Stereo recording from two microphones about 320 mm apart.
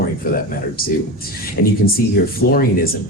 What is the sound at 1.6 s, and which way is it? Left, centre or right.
Speech, left.